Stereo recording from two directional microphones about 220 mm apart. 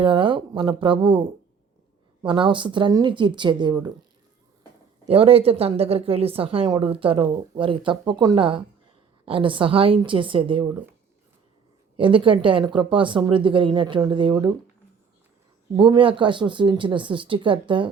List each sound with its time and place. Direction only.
0.0 s a woman's voice: 25° right (ahead or behind)
2.2 s a woman's voice: 20° right (ahead or behind)
5.0 s a woman's voice: 25° right (ahead or behind)
11.9 s a woman's voice: 25° right (ahead or behind)
15.7 s a woman's voice: 20° right (ahead or behind)